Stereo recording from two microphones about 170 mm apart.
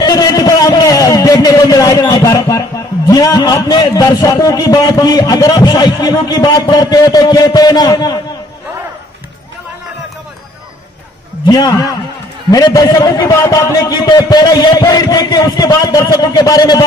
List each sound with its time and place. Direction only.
0.0 s a sound: 20° left (ahead or behind)
3.1 s a man's voice: 20° left (ahead or behind)
11.4 s a man's voice: 20° left (ahead or behind)